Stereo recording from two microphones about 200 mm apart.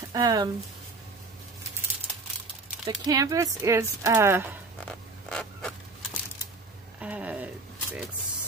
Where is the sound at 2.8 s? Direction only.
20° right (ahead or behind).